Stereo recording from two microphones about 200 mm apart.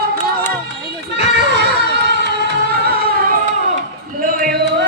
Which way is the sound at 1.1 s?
55° right (ahead or behind).